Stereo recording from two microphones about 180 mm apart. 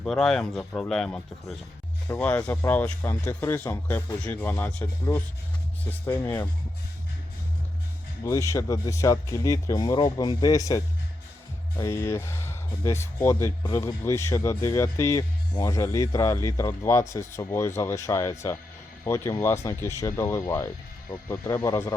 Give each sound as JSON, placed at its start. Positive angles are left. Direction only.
{"t": 0.0, "sound": "speech", "side_deg": 0}
{"t": 8.2, "sound": "speech", "side_deg": 15}